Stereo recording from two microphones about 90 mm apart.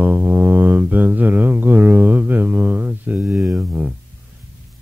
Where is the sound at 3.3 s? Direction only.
5° right (ahead or behind).